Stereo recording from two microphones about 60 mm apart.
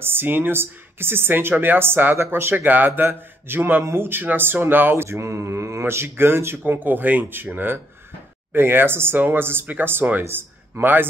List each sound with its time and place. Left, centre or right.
0.0 s speech: right
2.5 s speech: right